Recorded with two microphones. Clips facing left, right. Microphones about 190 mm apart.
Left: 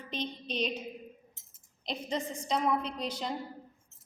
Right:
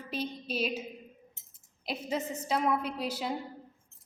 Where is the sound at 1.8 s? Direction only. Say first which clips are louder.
Right 1 dB; 5° right (ahead or behind).